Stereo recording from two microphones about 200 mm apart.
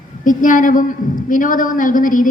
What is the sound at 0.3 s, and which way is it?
A woman's voice, 40° left (ahead or behind).